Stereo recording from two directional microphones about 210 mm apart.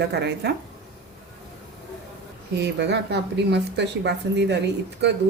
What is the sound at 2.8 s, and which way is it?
Speech, 55° right (ahead or behind).